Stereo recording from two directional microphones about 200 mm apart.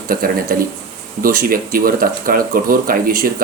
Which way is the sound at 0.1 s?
45° right (ahead or behind).